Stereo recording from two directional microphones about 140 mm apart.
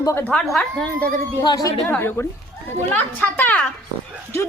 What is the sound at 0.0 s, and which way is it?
Speech, 20° left (ahead or behind).